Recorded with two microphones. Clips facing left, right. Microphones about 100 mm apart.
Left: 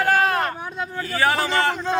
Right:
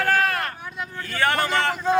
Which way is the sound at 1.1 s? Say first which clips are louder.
Left 1 dB; 5° left (ahead or behind).